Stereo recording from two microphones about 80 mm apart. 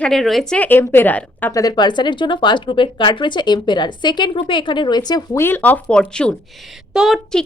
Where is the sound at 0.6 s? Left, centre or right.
Left.